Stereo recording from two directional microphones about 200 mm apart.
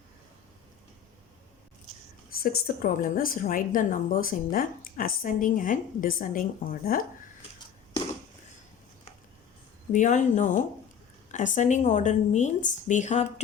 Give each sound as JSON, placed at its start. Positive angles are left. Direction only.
{"t": 2.4, "sound": "a woman's voice", "side_deg": 45}
{"t": 9.9, "sound": "speech", "side_deg": 40}